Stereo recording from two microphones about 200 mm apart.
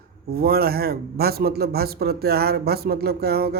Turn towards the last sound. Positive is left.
turn(degrees=-50)  # may be behind; listen again after turning